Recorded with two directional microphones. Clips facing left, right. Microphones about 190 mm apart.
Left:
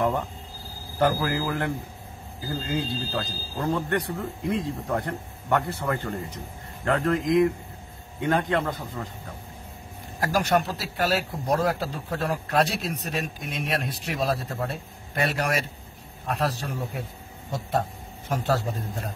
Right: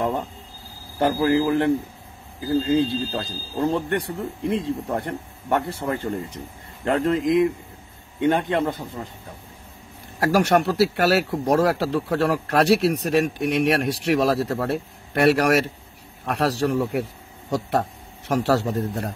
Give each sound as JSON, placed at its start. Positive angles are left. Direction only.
{"t": 0.9, "sound": "speech", "side_deg": -25}
{"t": 10.2, "sound": "speech", "side_deg": -70}